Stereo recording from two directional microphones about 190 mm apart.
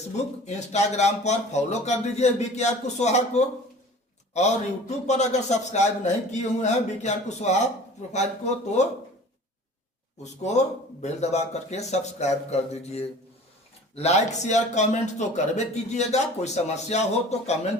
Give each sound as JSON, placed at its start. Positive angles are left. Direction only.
{"t": 0.2, "sound": "a man's voice", "side_deg": 35}
{"t": 4.9, "sound": "a man's voice", "side_deg": 35}
{"t": 10.4, "sound": "a man's voice", "side_deg": 35}